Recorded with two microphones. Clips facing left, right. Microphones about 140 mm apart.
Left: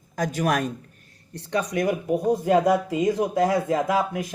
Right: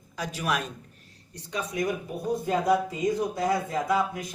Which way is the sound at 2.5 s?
65° left (ahead or behind).